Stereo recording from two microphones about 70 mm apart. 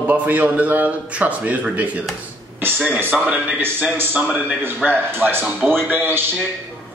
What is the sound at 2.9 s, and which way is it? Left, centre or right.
A man's voice, right.